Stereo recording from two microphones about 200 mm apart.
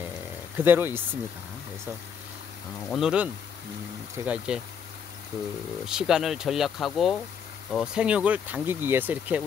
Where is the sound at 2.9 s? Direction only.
5° right (ahead or behind).